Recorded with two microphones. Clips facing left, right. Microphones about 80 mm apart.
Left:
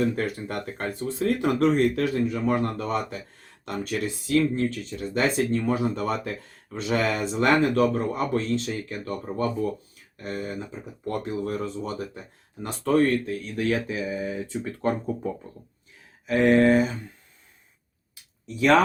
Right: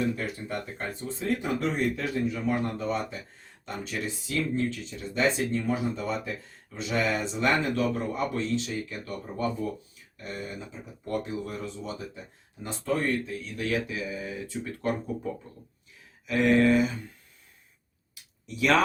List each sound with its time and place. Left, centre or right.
0.2 s speech: left
6.7 s speech: left
10.2 s speech: left
12.6 s speech: left
18.1 s a sound: left